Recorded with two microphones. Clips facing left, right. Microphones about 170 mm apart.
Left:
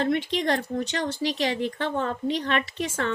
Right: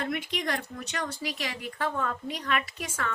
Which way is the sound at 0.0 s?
30° left (ahead or behind).